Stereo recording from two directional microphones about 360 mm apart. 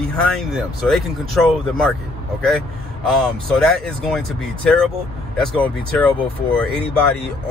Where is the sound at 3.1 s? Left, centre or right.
Centre.